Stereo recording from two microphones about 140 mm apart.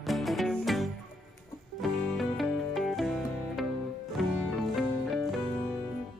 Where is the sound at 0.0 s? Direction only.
Centre (ahead or behind).